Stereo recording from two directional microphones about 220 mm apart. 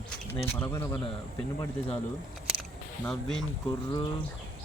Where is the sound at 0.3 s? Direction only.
10° left (ahead or behind).